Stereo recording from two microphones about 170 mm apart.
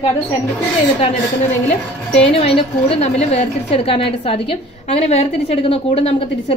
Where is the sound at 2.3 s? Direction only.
35° left (ahead or behind).